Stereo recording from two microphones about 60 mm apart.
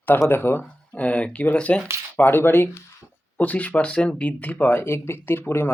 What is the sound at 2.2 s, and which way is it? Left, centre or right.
Speech, left.